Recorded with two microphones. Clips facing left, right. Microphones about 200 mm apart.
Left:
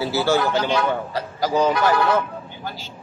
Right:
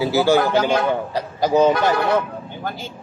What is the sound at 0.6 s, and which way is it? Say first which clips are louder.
Speech: right 3 dB; 50° right (ahead or behind).